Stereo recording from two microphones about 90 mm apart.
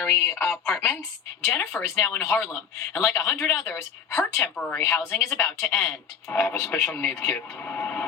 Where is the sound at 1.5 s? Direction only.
20° left (ahead or behind).